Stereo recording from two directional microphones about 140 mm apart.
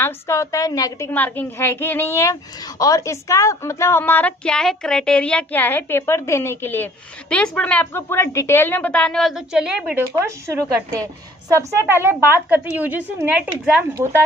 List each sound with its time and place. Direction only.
0.0 s a woman's voice: 20° left (ahead or behind); by 10.0 s 5° right (ahead or behind)
10.2 s speech: 20° right (ahead or behind)
11.9 s a woman's voice: 15° right (ahead or behind)
13.9 s a woman's voice: 20° right (ahead or behind)